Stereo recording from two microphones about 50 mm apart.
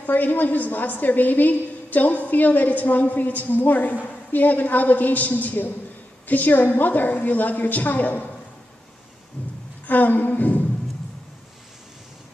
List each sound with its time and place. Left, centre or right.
0.0 s a woman's voice: left
9.4 s a sound: left
9.8 s a woman's voice: left